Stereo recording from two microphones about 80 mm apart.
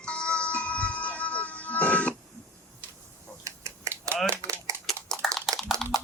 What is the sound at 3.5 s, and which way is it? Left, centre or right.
Finger snapping, right.